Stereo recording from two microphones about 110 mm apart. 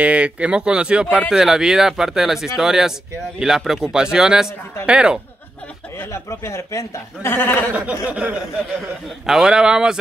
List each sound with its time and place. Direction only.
0.0 s speech: 10° right (ahead or behind)
5.9 s speech: 25° left (ahead or behind)
7.7 s speech: 15° right (ahead or behind)